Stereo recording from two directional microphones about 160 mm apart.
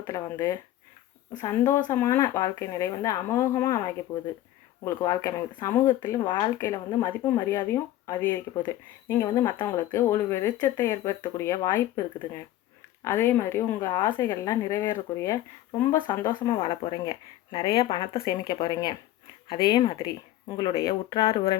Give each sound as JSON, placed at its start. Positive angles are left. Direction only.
{"t": 0.1, "sound": "a woman's voice", "side_deg": 20}
{"t": 21.2, "sound": "speech", "side_deg": 35}